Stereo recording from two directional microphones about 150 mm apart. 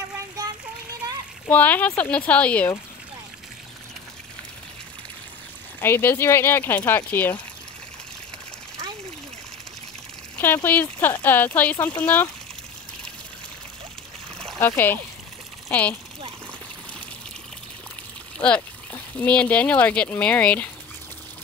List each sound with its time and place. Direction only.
1.5 s speech: 10° left (ahead or behind)
5.8 s speech: 15° left (ahead or behind)
10.4 s speech: 15° left (ahead or behind)
14.6 s speech: 15° left (ahead or behind)
18.4 s speech: 10° left (ahead or behind)